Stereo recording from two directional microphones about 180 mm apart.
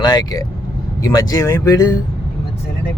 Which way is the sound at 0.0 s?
25° left (ahead or behind).